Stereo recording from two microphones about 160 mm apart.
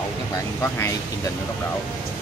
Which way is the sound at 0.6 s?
15° left (ahead or behind).